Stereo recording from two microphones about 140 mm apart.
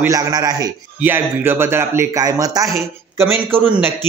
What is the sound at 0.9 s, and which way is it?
Speech, 15° right (ahead or behind).